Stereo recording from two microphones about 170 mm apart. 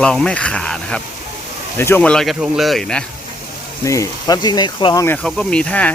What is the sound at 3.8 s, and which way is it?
Speech, 20° left (ahead or behind).